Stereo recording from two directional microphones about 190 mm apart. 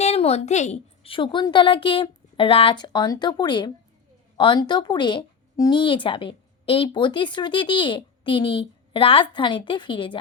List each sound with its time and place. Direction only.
0.0 s a woman's voice: 35° left (ahead or behind)